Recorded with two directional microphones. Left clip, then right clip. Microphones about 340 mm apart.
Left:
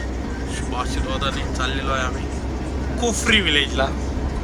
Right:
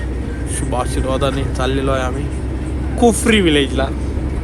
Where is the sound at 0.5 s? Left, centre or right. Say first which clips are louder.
Right 6 dB; centre.